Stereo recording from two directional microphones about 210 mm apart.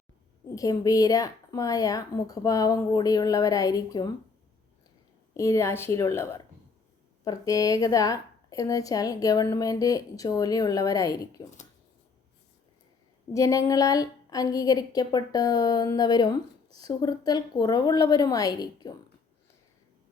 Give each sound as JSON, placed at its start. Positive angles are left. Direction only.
{"t": 0.5, "sound": "a woman's voice", "side_deg": 15}
{"t": 5.3, "sound": "a woman's voice", "side_deg": 15}
{"t": 13.3, "sound": "a woman's voice", "side_deg": 15}